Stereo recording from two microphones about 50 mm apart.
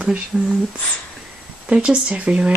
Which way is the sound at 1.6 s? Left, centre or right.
Centre.